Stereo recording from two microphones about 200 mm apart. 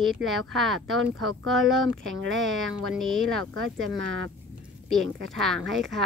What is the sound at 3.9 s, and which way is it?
Speech, 70° right (ahead or behind).